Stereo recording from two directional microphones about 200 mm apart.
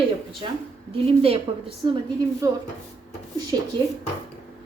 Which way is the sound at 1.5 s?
30° right (ahead or behind).